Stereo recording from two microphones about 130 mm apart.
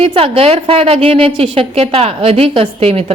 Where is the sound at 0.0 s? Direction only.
45° right (ahead or behind).